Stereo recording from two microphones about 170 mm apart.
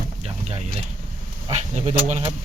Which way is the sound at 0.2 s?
40° right (ahead or behind).